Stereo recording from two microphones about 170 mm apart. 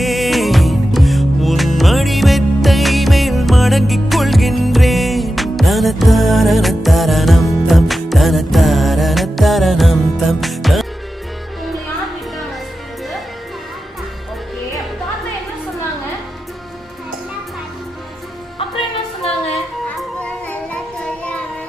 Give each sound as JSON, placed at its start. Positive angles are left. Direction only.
{"t": 0.0, "sound": "music", "side_deg": 0}
{"t": 18.6, "sound": "music", "side_deg": 35}
{"t": 19.5, "sound": "music", "side_deg": 5}